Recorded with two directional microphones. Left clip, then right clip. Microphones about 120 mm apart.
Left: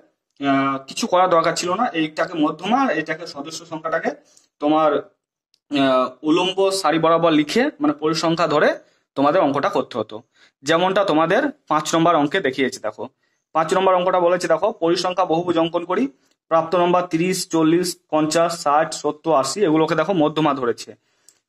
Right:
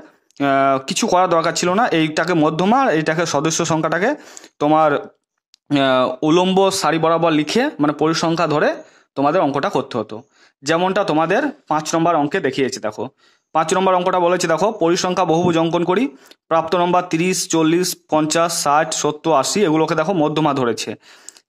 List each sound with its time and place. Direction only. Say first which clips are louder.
1.0 s speech: even; 40° right (ahead or behind); by 6.9 s 65° right (ahead or behind)
6.9 s speech: even; 40° right (ahead or behind)
7.8 s speech: right 3 dB; 55° right (ahead or behind)